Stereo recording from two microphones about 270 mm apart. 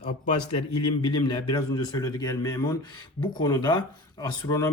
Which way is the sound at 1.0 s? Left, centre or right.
Centre.